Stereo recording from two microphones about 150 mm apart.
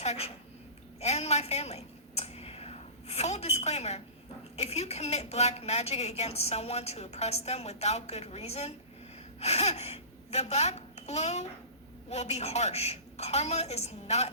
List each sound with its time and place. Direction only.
0.0 s a woman's voice: 45° left (ahead or behind)
0.9 s a sound: 45° left (ahead or behind)
4.5 s a woman's voice: 45° left (ahead or behind)